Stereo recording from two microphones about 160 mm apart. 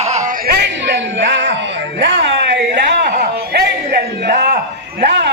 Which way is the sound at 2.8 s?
90° right.